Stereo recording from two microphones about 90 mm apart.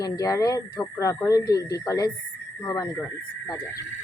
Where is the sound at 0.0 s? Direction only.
40° left (ahead or behind).